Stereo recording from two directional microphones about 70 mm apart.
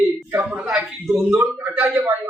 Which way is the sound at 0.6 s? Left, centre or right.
Centre.